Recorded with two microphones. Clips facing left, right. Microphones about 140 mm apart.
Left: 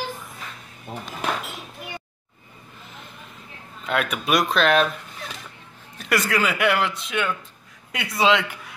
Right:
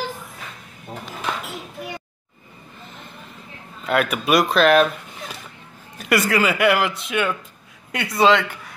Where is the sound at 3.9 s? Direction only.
5° right (ahead or behind).